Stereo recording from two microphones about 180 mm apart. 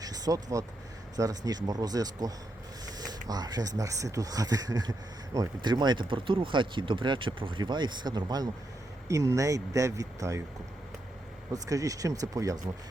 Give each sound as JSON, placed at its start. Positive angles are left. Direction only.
{"t": 0.0, "sound": "vehicle", "side_deg": -20}
{"t": 1.1, "sound": "speech", "side_deg": -20}
{"t": 11.5, "sound": "speech", "side_deg": -20}